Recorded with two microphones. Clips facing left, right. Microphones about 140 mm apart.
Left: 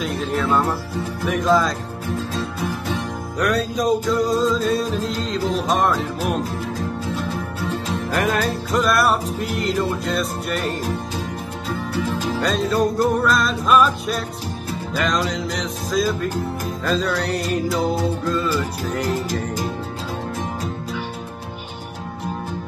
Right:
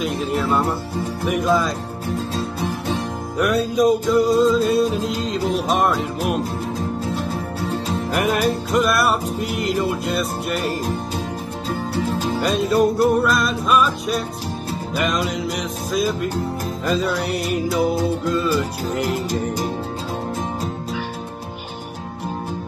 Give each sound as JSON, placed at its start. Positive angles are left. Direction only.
{"t": 0.0, "sound": "music", "side_deg": -5}
{"t": 2.3, "sound": "music", "side_deg": -30}
{"t": 3.3, "sound": "music", "side_deg": -5}
{"t": 8.2, "sound": "music", "side_deg": -15}
{"t": 8.8, "sound": "music", "side_deg": 0}
{"t": 12.4, "sound": "music", "side_deg": -15}